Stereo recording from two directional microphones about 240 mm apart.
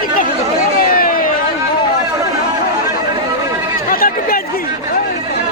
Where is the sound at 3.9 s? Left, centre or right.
Left.